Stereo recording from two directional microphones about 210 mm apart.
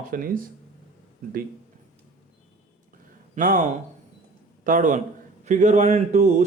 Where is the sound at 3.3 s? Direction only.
40° right (ahead or behind).